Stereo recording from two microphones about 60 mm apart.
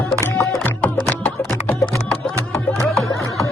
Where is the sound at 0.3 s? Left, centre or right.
Left.